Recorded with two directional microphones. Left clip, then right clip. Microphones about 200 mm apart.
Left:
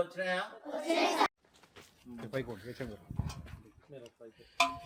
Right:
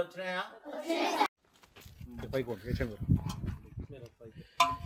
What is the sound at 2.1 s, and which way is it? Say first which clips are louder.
Speech: right 4 dB; 30° right (ahead or behind).